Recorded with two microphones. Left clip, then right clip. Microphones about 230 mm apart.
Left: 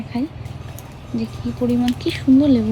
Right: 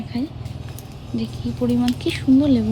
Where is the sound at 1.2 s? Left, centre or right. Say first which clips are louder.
Left 1 dB; left.